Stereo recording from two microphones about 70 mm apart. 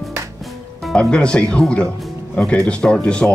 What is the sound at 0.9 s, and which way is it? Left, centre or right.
Speech, centre.